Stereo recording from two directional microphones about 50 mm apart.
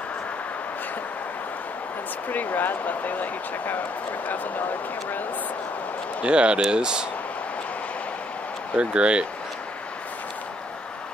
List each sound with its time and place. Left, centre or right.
2.2 s speech: left
6.2 s speech: right
8.7 s speech: right